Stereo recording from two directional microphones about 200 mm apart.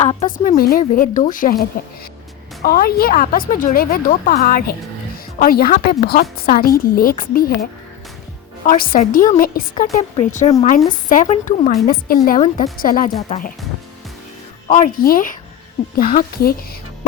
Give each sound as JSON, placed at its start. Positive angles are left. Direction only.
{"t": 0.0, "sound": "a woman's voice", "side_deg": 30}
{"t": 14.7, "sound": "a woman's voice", "side_deg": 40}